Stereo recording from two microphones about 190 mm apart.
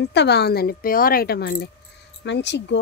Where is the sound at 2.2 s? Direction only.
65° left (ahead or behind).